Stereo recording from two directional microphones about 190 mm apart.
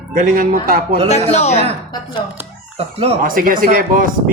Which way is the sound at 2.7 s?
35° right (ahead or behind).